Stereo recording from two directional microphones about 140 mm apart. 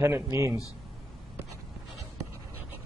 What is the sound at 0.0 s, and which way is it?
Speech, 20° right (ahead or behind).